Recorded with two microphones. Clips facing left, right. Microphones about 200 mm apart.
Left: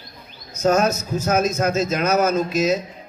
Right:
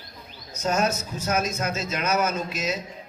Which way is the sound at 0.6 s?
45° left (ahead or behind).